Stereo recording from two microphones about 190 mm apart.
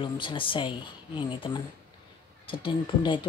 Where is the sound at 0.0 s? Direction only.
25° left (ahead or behind).